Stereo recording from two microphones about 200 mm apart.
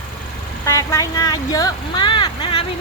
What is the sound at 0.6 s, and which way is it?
Speech, 15° left (ahead or behind).